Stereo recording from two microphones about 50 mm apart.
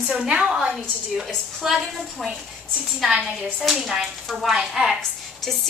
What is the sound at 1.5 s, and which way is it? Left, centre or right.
A woman's voice, centre.